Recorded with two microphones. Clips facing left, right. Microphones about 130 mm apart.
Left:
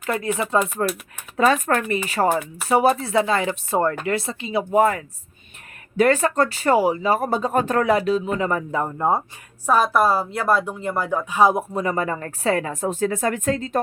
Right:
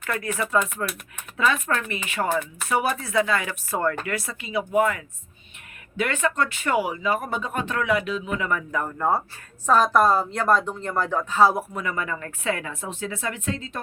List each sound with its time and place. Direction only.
0.0 s speech: 25° left (ahead or behind)
1.4 s speech: 40° left (ahead or behind); by 9.2 s 20° left (ahead or behind)
9.6 s speech: 10° left (ahead or behind)
11.7 s a woman's voice: 35° left (ahead or behind)